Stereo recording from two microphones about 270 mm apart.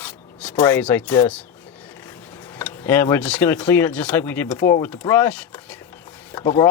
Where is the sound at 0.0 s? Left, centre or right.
Centre.